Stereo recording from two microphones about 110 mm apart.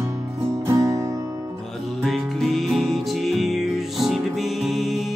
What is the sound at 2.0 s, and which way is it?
Music, centre (ahead or behind).